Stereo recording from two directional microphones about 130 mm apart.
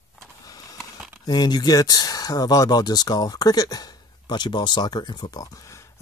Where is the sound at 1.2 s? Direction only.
35° left (ahead or behind).